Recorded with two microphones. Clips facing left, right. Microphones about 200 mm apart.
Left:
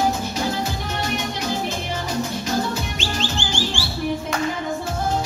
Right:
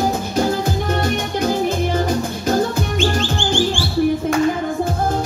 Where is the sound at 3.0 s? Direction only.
50° right (ahead or behind).